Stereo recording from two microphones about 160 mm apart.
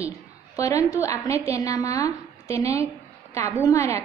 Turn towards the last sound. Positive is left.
turn(degrees=20)  # may be behind; listen again after turning